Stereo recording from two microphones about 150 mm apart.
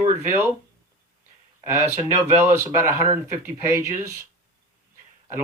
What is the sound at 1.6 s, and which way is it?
Speech, 20° right (ahead or behind).